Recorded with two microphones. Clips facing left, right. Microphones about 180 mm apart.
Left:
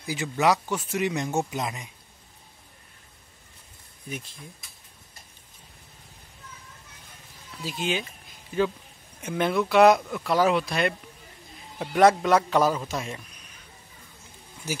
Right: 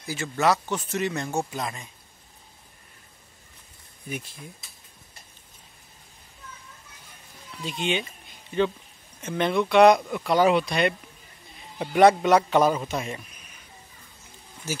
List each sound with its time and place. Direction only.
0.0 s speech: 15° left (ahead or behind)
7.6 s speech: centre (ahead or behind)